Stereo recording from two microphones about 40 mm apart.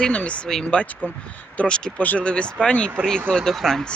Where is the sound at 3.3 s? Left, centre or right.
Centre.